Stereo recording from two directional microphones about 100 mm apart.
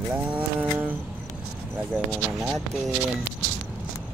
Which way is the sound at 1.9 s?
5° right (ahead or behind).